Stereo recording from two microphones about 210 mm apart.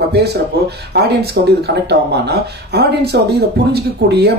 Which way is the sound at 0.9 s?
50° right (ahead or behind).